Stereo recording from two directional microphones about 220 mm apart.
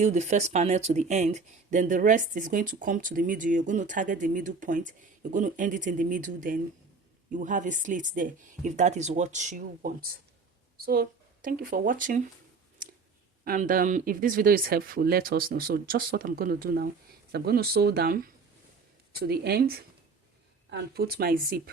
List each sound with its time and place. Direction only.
0.0 s speech: 30° right (ahead or behind)
13.4 s speech: 40° right (ahead or behind)
19.2 s speech: 45° right (ahead or behind)